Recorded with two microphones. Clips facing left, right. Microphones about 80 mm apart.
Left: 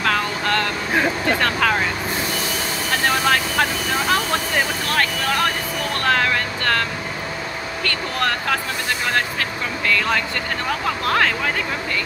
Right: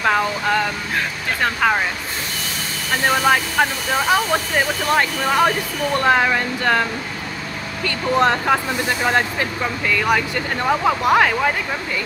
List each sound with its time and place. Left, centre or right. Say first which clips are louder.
0.0 s vehicle: right 3 dB; centre
1.4 s speech: right 4 dB; centre
3.1 s speech: right 3 dB; centre